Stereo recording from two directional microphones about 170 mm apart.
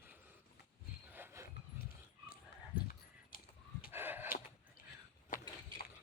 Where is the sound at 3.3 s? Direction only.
55° left (ahead or behind).